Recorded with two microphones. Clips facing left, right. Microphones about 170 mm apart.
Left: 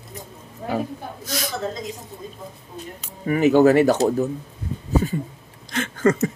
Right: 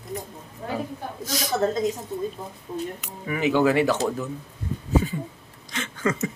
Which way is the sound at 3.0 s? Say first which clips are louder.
Left 11 dB; 45° left (ahead or behind).